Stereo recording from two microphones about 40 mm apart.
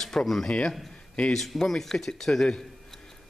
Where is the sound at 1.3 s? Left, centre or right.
Centre.